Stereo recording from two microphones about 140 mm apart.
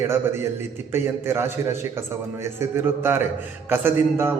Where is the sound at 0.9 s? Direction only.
15° right (ahead or behind).